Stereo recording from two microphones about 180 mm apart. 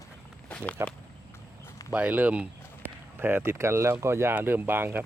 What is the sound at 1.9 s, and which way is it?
Speech, 10° right (ahead or behind).